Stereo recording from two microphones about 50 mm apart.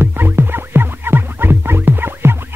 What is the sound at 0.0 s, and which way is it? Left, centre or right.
Music, right.